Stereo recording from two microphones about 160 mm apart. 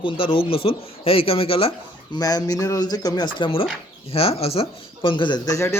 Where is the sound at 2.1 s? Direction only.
25° left (ahead or behind).